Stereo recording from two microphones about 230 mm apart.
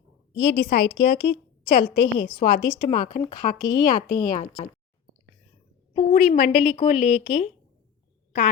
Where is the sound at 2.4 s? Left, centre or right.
Left.